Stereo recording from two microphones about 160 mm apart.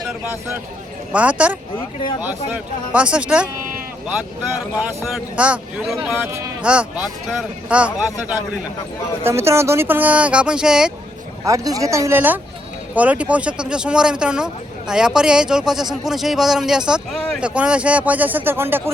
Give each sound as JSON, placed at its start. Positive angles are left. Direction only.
{"t": 1.1, "sound": "a man's voice", "side_deg": -10}
{"t": 5.1, "sound": "a man's voice", "side_deg": -5}
{"t": 11.4, "sound": "a man's voice", "side_deg": -20}